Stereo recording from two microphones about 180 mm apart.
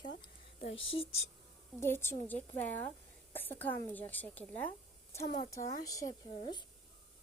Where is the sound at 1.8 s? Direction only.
15° left (ahead or behind).